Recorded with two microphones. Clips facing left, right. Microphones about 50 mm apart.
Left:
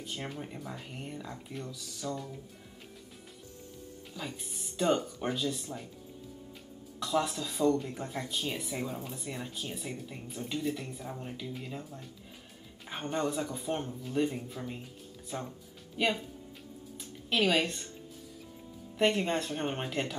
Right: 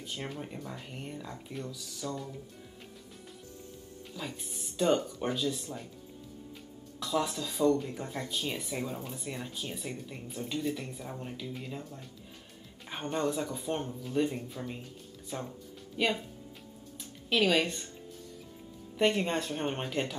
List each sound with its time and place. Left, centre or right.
0.0 s speech: centre
4.1 s speech: centre
7.0 s speech: centre
17.3 s speech: centre
18.9 s speech: centre